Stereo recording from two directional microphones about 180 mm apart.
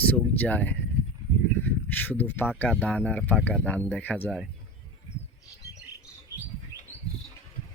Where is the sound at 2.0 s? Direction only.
10° left (ahead or behind).